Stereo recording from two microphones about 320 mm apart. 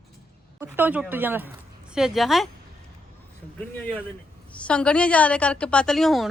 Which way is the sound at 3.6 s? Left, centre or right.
Centre.